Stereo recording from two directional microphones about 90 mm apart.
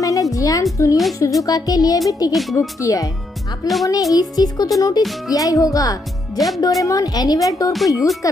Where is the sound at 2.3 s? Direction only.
Centre (ahead or behind).